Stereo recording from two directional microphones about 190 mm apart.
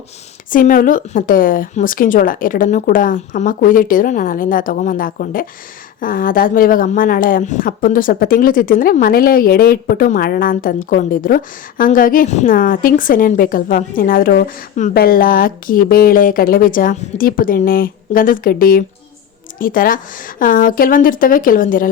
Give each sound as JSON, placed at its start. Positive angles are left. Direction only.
{"t": 0.5, "sound": "a woman's voice", "side_deg": 45}